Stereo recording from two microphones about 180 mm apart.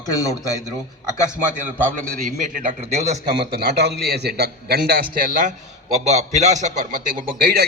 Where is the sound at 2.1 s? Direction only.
50° right (ahead or behind).